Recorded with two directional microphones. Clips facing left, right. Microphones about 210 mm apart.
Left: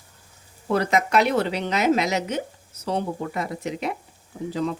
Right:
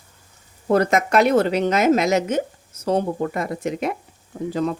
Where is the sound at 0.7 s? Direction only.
50° right (ahead or behind).